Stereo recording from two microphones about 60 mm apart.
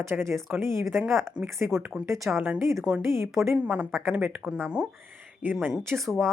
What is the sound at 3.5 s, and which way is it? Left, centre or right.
Speech, right.